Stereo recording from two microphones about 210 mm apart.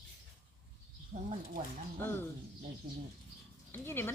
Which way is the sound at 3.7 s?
10° left (ahead or behind).